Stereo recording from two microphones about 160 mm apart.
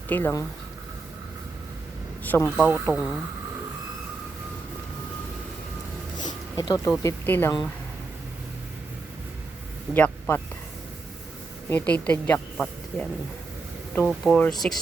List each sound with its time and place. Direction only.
0.1 s speech: 15° left (ahead or behind)
2.2 s speech: 10° left (ahead or behind)
2.9 s speech: 15° right (ahead or behind)
6.2 s a sound: 25° left (ahead or behind)
7.0 s speech: 15° left (ahead or behind)
9.9 s speech: 15° left (ahead or behind)
11.7 s speech: 10° left (ahead or behind)
14.0 s speech: 5° right (ahead or behind)